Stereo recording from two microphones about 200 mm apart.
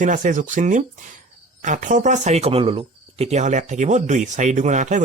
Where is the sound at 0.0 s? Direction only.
40° right (ahead or behind).